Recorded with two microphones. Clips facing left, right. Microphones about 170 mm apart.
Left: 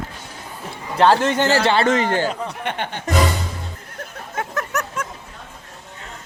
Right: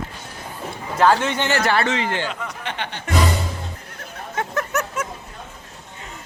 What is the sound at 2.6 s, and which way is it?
Music, 55° left (ahead or behind).